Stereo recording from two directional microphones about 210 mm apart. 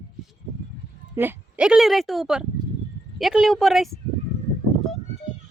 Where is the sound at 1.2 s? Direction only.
10° right (ahead or behind).